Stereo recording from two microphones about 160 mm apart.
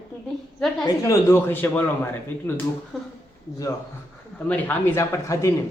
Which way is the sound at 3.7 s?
20° left (ahead or behind).